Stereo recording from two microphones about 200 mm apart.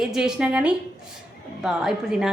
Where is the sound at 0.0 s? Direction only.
Centre (ahead or behind).